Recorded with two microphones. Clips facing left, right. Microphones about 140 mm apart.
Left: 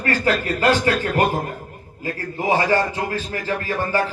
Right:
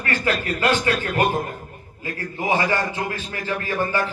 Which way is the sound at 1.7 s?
35° left (ahead or behind).